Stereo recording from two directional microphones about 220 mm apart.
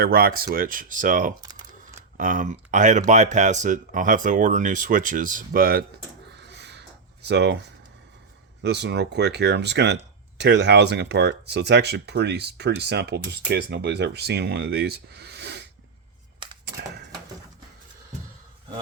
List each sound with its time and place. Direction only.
0.0 s speech: 45° right (ahead or behind)
1.4 s typing: 15° right (ahead or behind)
2.1 s speech: 35° right (ahead or behind)
6.3 s a sound: 50° right (ahead or behind)
8.6 s speech: 50° right (ahead or behind)